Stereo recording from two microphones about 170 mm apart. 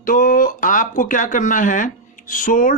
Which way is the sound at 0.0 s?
55° left (ahead or behind).